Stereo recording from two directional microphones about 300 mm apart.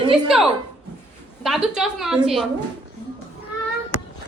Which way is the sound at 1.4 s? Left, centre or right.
Centre.